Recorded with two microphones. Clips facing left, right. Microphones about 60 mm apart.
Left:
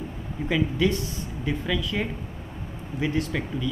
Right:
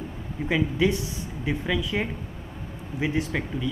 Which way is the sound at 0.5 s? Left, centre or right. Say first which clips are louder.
Even; centre.